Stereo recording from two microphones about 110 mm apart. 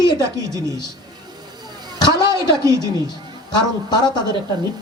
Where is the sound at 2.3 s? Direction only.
30° right (ahead or behind).